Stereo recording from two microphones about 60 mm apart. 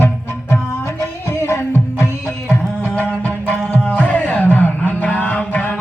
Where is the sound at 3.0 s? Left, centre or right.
Left.